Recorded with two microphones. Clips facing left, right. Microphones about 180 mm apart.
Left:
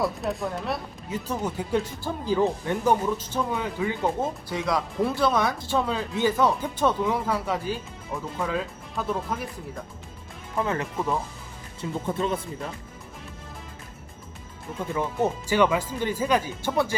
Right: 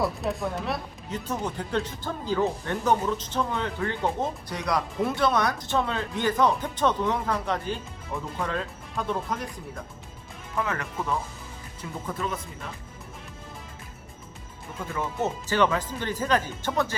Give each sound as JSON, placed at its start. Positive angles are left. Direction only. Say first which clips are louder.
{"t": 0.0, "sound": "speech", "louder": "even", "side_deg": 0}
{"t": 10.5, "sound": "speech", "louder": "left 3 dB", "side_deg": 25}
{"t": 14.9, "sound": "speech", "louder": "left 3 dB", "side_deg": 10}